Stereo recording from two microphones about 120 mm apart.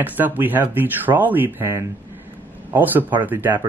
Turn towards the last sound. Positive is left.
turn(degrees=-15)  # may be behind; listen again after turning